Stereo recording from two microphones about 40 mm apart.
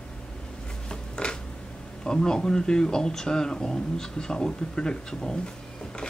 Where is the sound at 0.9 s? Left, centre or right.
Left.